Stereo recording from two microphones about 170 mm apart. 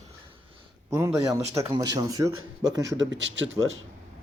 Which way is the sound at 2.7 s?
90° right.